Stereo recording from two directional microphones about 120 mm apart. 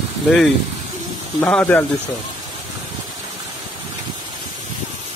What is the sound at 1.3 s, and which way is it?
Speech, 15° left (ahead or behind).